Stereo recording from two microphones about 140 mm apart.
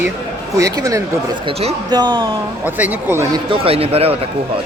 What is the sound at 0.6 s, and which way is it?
Speech, 25° right (ahead or behind).